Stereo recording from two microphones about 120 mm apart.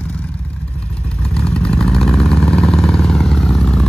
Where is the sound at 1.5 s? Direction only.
5° left (ahead or behind).